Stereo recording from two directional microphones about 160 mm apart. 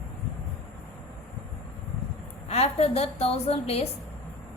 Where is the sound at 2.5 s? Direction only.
40° left (ahead or behind).